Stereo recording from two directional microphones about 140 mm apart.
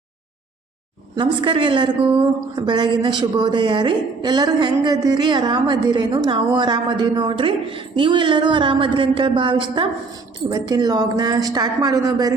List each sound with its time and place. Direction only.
1.1 s a woman's voice: 35° right (ahead or behind)